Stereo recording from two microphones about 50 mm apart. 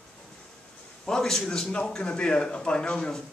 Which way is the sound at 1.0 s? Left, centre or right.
Centre.